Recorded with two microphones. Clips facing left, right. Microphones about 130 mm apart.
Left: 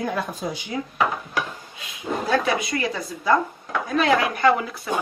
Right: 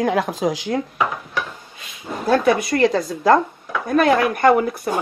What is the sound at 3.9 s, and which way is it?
Speech, 50° right (ahead or behind).